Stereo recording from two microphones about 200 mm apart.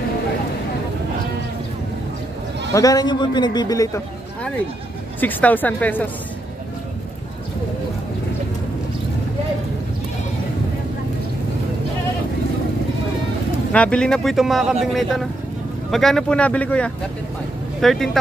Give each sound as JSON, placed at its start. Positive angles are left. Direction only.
{"t": 2.7, "sound": "a man's voice", "side_deg": 15}
{"t": 5.2, "sound": "speech", "side_deg": 10}
{"t": 13.7, "sound": "speech", "side_deg": 5}